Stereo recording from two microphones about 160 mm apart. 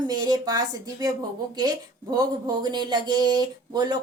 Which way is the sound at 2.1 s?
25° right (ahead or behind).